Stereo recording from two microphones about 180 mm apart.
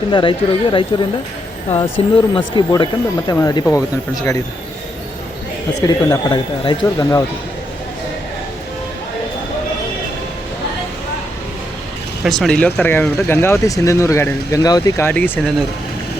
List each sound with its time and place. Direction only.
0.1 s speech: 25° left (ahead or behind)
5.8 s speech: 20° left (ahead or behind)
12.2 s speech: centre (ahead or behind)